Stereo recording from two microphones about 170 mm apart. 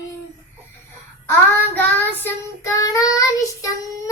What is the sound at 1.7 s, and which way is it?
Child singing, 10° left (ahead or behind).